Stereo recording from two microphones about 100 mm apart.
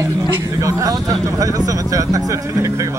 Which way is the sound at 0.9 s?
35° right (ahead or behind).